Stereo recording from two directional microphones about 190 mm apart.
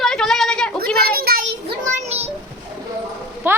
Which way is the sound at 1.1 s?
55° right (ahead or behind).